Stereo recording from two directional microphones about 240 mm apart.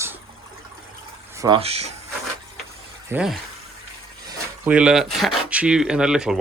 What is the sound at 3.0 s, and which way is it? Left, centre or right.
Speech, centre.